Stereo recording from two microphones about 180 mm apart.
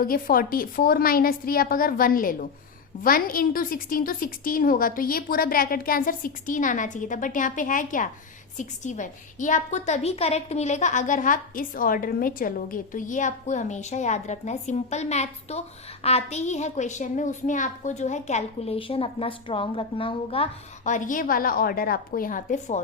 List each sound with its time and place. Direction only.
0.0 s a woman's voice: 55° left (ahead or behind)